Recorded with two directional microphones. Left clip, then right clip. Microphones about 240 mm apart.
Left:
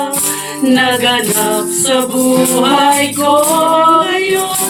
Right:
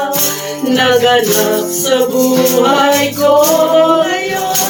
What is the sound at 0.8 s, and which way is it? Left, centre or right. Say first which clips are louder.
Music: right 4 dB; left.